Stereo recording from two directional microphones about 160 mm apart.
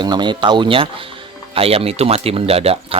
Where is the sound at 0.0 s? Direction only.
30° right (ahead or behind).